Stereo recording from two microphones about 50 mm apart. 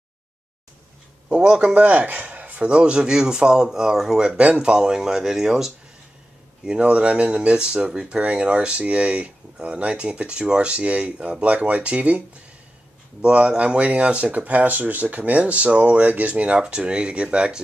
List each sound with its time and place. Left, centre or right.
1.3 s speech: centre; by 2.7 s right
2.7 s speech: centre
13.2 s speech: right